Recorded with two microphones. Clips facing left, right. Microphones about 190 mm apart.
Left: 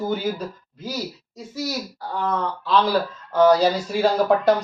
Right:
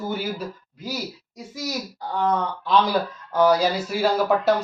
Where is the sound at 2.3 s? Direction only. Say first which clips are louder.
Even; 15° right (ahead or behind).